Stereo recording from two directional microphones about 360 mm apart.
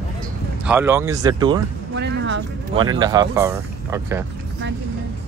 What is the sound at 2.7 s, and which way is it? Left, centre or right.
Speech, centre.